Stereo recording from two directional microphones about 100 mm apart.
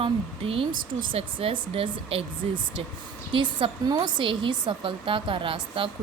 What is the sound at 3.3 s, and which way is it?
Speech, 55° right (ahead or behind).